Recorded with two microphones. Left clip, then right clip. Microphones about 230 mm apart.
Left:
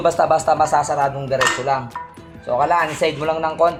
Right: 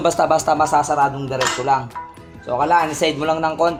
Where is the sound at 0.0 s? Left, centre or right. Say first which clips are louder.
Even; right.